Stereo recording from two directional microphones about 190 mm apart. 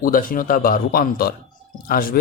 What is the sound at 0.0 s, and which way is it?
Speech, 45° left (ahead or behind).